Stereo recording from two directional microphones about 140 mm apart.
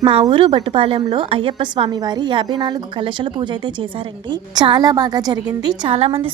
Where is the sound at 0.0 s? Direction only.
40° right (ahead or behind).